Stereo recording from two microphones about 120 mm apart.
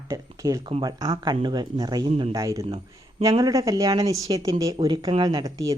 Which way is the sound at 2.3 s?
25° right (ahead or behind).